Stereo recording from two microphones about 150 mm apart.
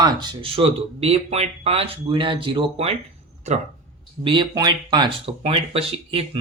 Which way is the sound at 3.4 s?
50° right (ahead or behind).